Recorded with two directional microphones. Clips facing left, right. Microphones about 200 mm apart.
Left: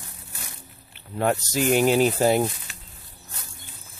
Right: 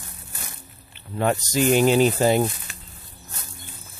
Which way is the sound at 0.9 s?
5° left (ahead or behind).